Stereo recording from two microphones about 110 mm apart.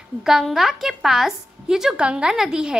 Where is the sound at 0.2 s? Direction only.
5° right (ahead or behind).